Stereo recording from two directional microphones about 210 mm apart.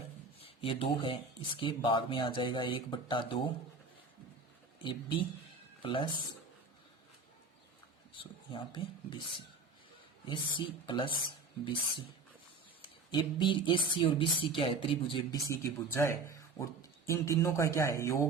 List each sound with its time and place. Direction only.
0.4 s speech: 25° left (ahead or behind)
4.8 s speech: 20° left (ahead or behind)
8.2 s speech: 25° left (ahead or behind)
10.2 s speech: 25° left (ahead or behind)
12.8 s speech: 25° left (ahead or behind)